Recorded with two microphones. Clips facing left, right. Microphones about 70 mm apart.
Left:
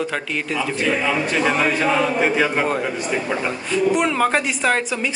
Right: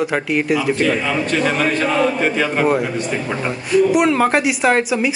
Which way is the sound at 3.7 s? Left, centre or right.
Centre.